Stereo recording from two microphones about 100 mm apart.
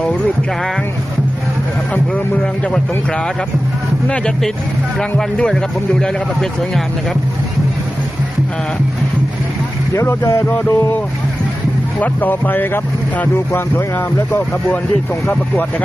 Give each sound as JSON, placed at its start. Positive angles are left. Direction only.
{"t": 1.9, "sound": "speech", "side_deg": 15}
{"t": 4.9, "sound": "speech", "side_deg": 10}
{"t": 9.9, "sound": "speech", "side_deg": 30}